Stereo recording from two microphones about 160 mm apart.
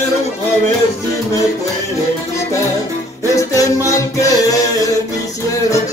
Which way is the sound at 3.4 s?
20° left (ahead or behind).